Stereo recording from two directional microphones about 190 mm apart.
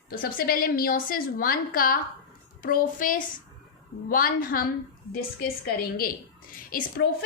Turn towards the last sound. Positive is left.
turn(degrees=50)  # may be behind; listen again after turning